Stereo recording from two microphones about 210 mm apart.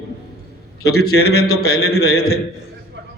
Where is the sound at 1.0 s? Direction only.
50° left (ahead or behind).